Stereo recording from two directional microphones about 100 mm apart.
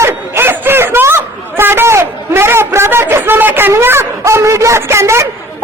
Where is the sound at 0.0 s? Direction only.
25° right (ahead or behind).